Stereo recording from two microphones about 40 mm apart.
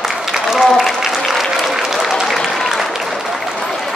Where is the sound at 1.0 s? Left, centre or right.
Centre.